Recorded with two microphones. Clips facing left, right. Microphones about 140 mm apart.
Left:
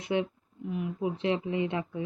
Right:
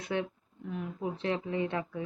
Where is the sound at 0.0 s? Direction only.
20° left (ahead or behind).